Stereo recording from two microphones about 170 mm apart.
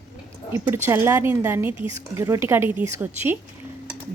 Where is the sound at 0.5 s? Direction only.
15° right (ahead or behind).